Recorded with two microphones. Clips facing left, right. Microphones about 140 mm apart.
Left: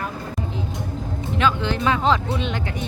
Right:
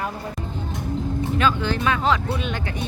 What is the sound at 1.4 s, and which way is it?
Speech, 20° left (ahead or behind).